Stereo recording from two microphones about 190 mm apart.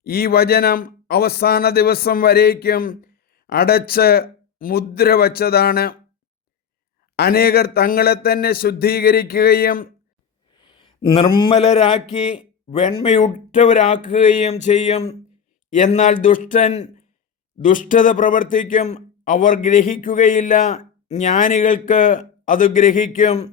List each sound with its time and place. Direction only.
0.0 s speech: 55° left (ahead or behind)
7.2 s a man's voice: 55° left (ahead or behind)
10.5 s a sound: 25° left (ahead or behind)
11.4 s a man's voice: 35° left (ahead or behind)